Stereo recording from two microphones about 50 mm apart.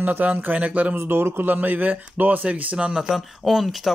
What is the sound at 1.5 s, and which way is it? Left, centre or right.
Speech, right.